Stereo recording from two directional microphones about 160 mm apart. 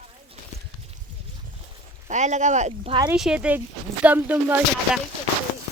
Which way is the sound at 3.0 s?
5° right (ahead or behind).